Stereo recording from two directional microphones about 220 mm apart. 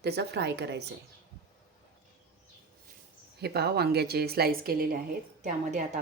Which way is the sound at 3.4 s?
45° right (ahead or behind).